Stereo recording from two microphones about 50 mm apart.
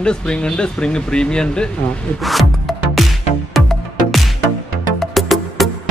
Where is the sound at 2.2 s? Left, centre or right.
Centre.